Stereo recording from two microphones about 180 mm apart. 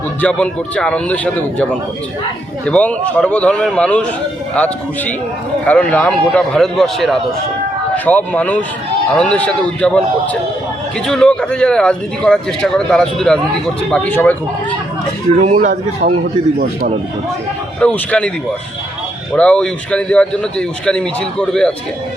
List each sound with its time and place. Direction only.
0.2 s a man's voice: 5° left (ahead or behind)
2.6 s a man's voice: 5° left (ahead or behind)
11.0 s a man's voice: 5° left (ahead or behind)
15.4 s a man's voice: 40° right (ahead or behind)
17.7 s speech: 5° left (ahead or behind)
19.3 s speech: 5° left (ahead or behind)